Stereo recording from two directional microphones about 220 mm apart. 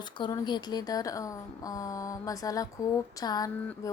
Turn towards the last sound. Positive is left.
turn(degrees=15)  # may be behind; listen again after turning